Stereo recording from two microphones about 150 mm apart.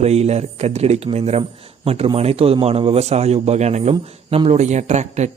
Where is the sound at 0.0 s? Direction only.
45° right (ahead or behind).